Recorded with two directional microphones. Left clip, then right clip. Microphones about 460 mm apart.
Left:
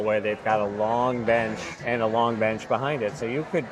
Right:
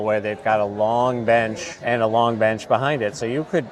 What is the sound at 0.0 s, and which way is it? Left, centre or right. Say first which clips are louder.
Speech: right 3 dB; right.